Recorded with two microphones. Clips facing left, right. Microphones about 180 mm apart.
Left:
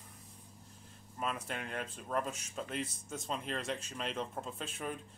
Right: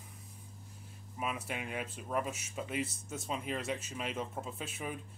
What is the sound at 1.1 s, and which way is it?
Speech, 10° right (ahead or behind).